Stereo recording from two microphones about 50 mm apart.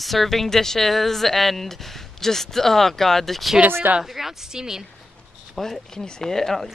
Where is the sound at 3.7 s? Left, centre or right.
Right.